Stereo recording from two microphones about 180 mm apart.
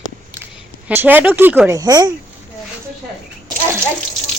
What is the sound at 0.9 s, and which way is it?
Speech, 10° right (ahead or behind).